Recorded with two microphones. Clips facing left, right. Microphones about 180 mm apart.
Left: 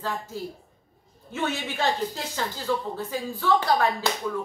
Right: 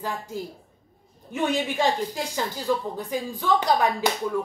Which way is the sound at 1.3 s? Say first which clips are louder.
Right 4 dB; 15° right (ahead or behind).